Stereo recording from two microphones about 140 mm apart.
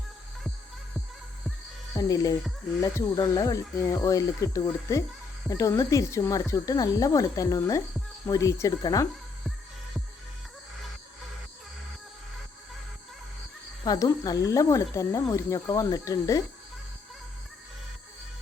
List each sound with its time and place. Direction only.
2.0 s speech: 25° left (ahead or behind)
13.8 s speech: 25° left (ahead or behind)